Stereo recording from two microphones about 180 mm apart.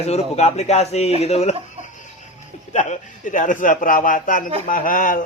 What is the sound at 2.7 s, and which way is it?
A man's voice, 40° left (ahead or behind).